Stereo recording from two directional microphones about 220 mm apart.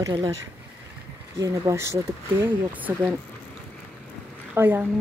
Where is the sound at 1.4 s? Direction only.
15° right (ahead or behind).